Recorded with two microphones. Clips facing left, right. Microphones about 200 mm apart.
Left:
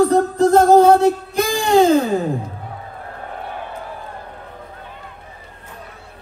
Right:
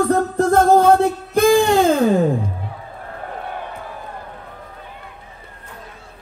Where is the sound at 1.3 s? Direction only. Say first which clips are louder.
Right 3 dB; 55° right (ahead or behind).